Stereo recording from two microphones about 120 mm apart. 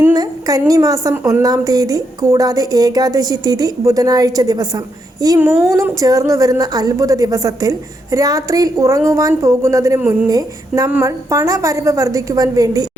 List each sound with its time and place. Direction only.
0.1 s a sound: 30° right (ahead or behind)
0.7 s a woman's voice: 30° right (ahead or behind)
10.0 s a woman's voice: 15° right (ahead or behind)
10.2 s a woman's voice: 30° right (ahead or behind)